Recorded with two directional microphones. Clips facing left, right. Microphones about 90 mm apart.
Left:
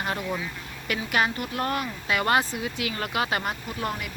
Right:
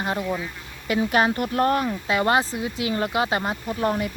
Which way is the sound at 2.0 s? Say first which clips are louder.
Right 1 dB; 25° right (ahead or behind).